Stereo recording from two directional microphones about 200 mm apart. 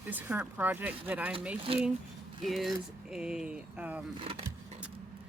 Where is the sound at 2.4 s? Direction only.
Centre (ahead or behind).